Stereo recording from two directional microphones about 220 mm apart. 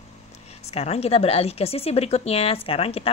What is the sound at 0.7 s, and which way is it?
Speech, 30° left (ahead or behind).